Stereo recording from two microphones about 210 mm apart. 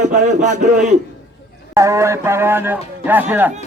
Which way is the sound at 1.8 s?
15° right (ahead or behind).